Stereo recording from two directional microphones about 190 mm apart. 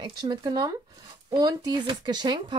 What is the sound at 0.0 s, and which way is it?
Speech, 25° right (ahead or behind).